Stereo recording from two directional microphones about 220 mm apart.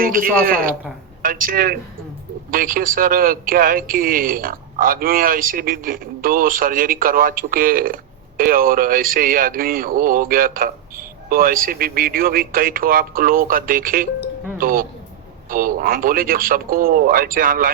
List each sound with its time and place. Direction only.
0.0 s speech: 40° right (ahead or behind)